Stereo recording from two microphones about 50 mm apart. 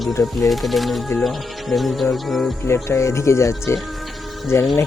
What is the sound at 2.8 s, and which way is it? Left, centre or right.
Speech, left.